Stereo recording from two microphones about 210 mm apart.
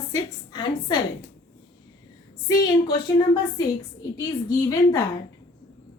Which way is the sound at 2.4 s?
15° left (ahead or behind).